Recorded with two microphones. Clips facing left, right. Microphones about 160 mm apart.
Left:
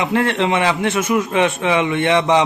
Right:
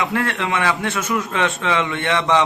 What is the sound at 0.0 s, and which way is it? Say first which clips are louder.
A man's voice: left 4 dB; 20° left (ahead or behind).